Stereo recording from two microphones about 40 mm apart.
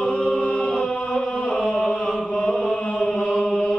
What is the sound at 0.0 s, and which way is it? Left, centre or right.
Chant, left.